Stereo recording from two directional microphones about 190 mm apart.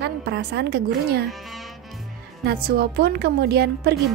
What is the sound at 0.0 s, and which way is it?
A woman's voice, 60° right (ahead or behind).